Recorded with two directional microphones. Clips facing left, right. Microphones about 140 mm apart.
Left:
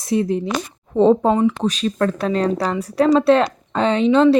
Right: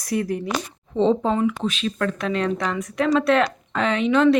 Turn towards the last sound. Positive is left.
turn(degrees=30)  # may be behind; listen again after turning